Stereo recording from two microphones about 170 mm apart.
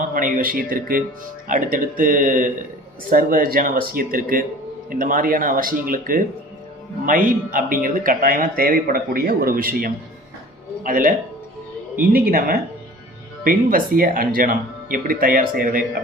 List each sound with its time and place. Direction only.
0.1 s speech: 55° right (ahead or behind)
12.1 s speech: 60° right (ahead or behind)